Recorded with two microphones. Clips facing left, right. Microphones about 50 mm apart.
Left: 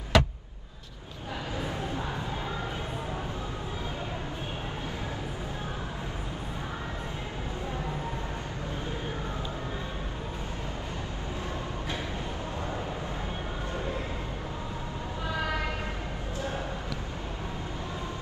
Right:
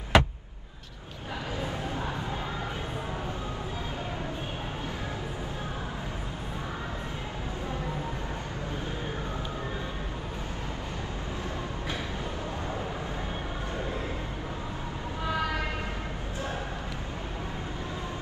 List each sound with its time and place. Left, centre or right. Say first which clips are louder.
0.1 s vehicle: right 2 dB; right